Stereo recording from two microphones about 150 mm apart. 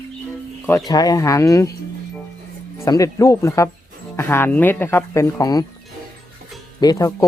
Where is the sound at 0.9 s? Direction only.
25° left (ahead or behind).